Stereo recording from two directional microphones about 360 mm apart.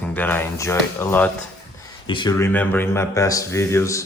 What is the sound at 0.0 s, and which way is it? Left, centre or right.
Speech, centre.